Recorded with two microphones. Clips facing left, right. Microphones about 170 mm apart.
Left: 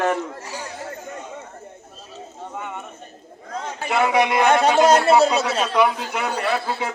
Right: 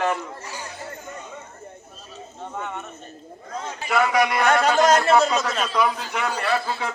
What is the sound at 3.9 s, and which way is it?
Speech, 25° left (ahead or behind).